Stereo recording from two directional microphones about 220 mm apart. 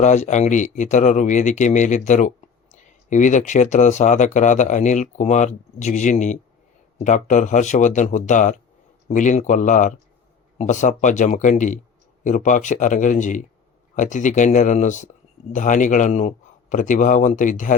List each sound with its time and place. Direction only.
0.0 s speech: 30° left (ahead or behind)